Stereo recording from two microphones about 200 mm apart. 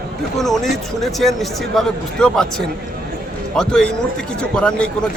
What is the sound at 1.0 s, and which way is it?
A man's voice, centre (ahead or behind).